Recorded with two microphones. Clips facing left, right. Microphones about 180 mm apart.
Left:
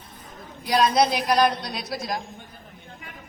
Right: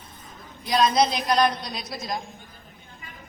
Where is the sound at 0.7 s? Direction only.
10° left (ahead or behind).